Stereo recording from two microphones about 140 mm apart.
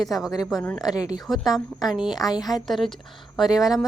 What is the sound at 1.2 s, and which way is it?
A woman's voice, centre (ahead or behind).